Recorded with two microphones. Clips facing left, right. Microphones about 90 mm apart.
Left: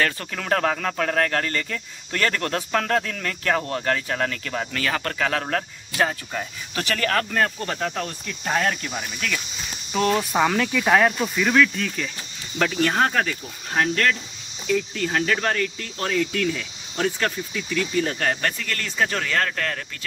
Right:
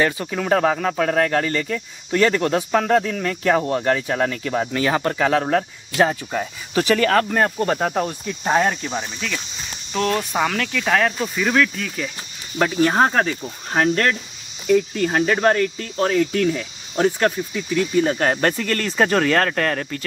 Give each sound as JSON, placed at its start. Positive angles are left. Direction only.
{"t": 0.0, "sound": "speech", "side_deg": -10}
{"t": 8.9, "sound": "speech", "side_deg": 0}
{"t": 12.5, "sound": "speech", "side_deg": -15}
{"t": 12.9, "sound": "speech", "side_deg": -25}
{"t": 13.7, "sound": "speech", "side_deg": -40}
{"t": 14.7, "sound": "speech", "side_deg": -5}
{"t": 18.2, "sound": "speech", "side_deg": -35}